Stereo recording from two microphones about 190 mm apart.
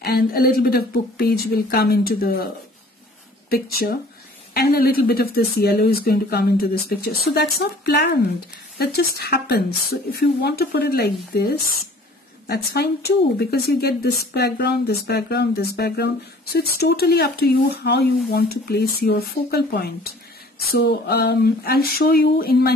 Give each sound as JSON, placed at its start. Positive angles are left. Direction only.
{"t": 0.0, "sound": "speech", "side_deg": 55}